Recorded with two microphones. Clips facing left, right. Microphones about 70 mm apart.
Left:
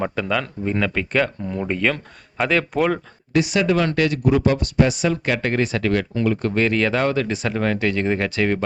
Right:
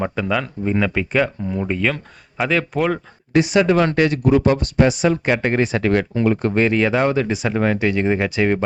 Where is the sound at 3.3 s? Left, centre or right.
Right.